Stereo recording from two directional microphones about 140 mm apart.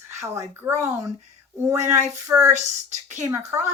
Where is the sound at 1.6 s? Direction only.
20° right (ahead or behind).